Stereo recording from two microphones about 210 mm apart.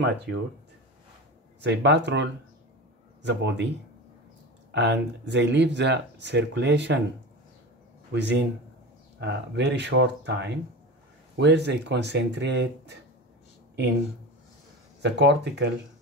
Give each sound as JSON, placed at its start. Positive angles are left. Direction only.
{"t": 0.0, "sound": "speech", "side_deg": -55}
{"t": 1.6, "sound": "speech", "side_deg": -55}
{"t": 4.7, "sound": "speech", "side_deg": -55}
{"t": 8.1, "sound": "speech", "side_deg": -55}
{"t": 15.0, "sound": "speech", "side_deg": -55}